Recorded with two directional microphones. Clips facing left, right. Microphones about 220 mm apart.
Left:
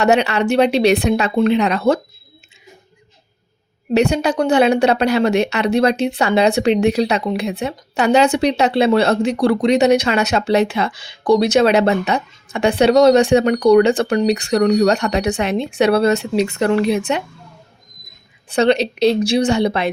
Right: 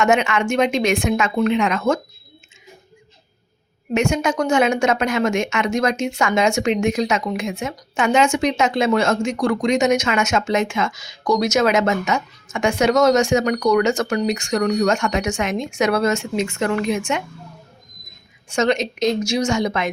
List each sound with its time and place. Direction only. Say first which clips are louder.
0.0 s speech: left 3 dB; 35° left (ahead or behind)
3.9 s speech: left 4 dB; 35° left (ahead or behind)
18.4 s speech: left 4 dB; 35° left (ahead or behind)